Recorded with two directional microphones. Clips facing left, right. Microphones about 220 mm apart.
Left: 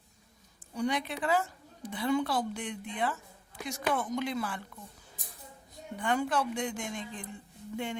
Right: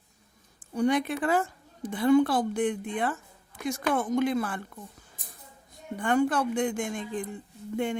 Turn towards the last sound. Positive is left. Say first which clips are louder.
# right 7 dB
turn(degrees=-50)  # may be behind; listen again after turning